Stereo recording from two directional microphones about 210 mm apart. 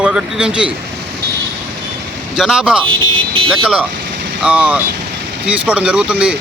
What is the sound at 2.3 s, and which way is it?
Speech, 5° right (ahead or behind).